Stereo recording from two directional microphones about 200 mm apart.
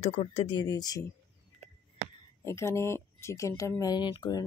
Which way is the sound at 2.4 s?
15° left (ahead or behind).